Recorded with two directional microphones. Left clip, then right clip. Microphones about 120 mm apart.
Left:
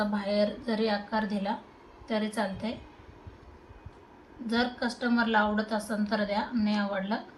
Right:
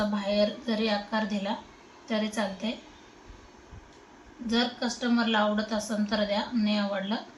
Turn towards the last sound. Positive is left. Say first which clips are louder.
# right 1 dB
turn(degrees=5)  # may be behind; listen again after turning